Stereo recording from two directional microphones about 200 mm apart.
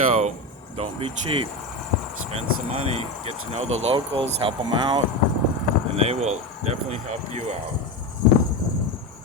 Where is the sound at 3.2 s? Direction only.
35° right (ahead or behind).